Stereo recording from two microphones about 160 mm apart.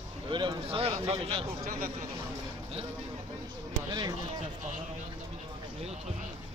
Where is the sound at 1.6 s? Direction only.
60° right (ahead or behind).